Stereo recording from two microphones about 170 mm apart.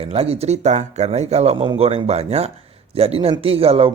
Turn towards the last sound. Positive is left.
turn(degrees=-35)  # may be behind; listen again after turning